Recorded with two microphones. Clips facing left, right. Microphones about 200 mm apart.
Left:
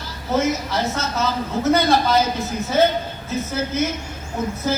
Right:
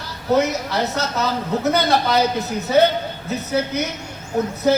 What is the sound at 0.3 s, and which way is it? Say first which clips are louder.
A woman's voice: even; 65° right (ahead or behind).